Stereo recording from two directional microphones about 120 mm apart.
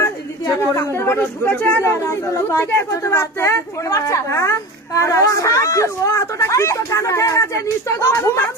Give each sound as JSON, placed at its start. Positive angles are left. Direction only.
{"t": 0.0, "sound": "speech", "side_deg": 25}